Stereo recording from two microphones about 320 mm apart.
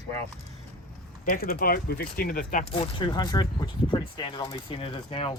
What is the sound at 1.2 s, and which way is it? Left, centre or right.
Speech, left.